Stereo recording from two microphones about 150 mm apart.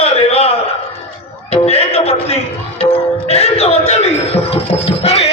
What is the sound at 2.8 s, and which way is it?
Music, 45° left (ahead or behind).